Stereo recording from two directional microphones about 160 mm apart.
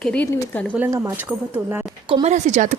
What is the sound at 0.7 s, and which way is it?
Speech, 15° right (ahead or behind).